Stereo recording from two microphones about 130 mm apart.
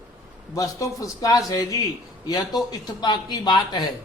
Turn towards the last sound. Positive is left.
turn(degrees=35)  # may be behind; listen again after turning